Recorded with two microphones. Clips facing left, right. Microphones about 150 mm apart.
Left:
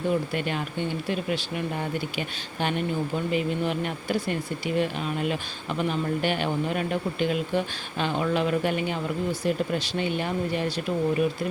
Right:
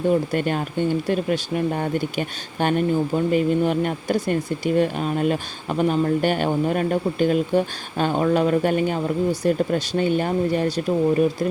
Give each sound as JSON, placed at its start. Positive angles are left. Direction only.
{"t": 0.1, "sound": "speech", "side_deg": -45}